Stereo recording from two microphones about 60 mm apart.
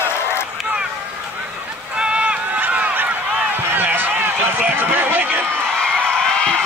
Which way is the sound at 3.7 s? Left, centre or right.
Right.